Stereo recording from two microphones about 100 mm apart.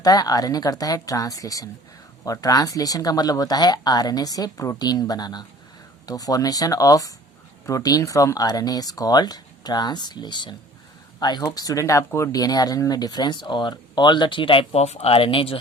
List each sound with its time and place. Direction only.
0.0 s speech: 40° left (ahead or behind); by 15.5 s 65° left (ahead or behind)